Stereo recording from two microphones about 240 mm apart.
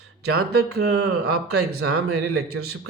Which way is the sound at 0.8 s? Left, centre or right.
Right.